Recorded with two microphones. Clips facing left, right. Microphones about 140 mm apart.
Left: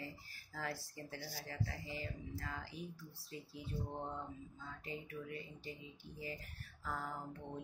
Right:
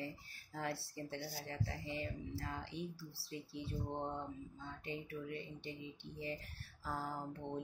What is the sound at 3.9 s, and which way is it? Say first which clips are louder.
Speech: right 3 dB; 25° right (ahead or behind).